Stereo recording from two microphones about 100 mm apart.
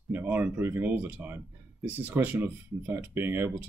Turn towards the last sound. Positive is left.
turn(degrees=-20)  # may be behind; listen again after turning